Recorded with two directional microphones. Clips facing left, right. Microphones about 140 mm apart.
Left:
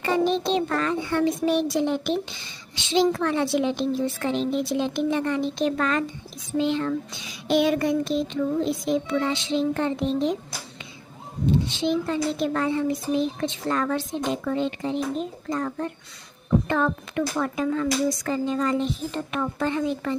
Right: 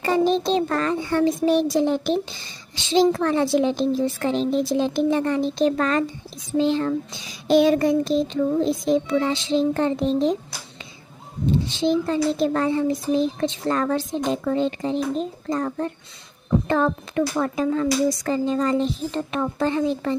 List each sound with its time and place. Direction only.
0.0 s child singing: 35° right (ahead or behind)
11.8 s child singing: 35° right (ahead or behind)